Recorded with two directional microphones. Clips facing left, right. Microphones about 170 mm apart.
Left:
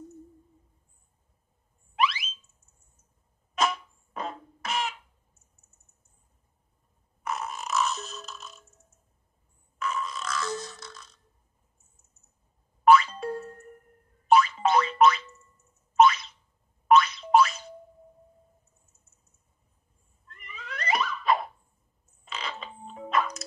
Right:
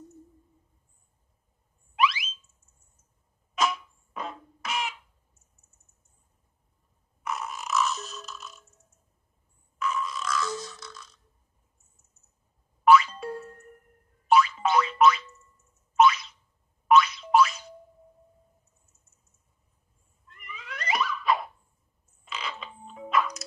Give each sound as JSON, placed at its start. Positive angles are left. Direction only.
{"t": 3.5, "sound": "music", "side_deg": 0}
{"t": 7.2, "sound": "burping", "side_deg": 0}
{"t": 9.8, "sound": "a sound", "side_deg": 0}
{"t": 12.8, "sound": "music", "side_deg": 0}
{"t": 14.2, "sound": "boing", "side_deg": 0}
{"t": 20.3, "sound": "cat", "side_deg": 0}
{"t": 22.2, "sound": "a sound", "side_deg": 0}
{"t": 22.7, "sound": "music", "side_deg": 35}
{"t": 23.0, "sound": "music", "side_deg": 0}